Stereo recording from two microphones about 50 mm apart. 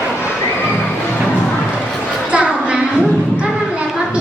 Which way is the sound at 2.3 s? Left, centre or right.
Right.